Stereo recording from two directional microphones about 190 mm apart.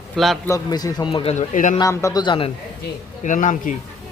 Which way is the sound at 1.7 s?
15° left (ahead or behind).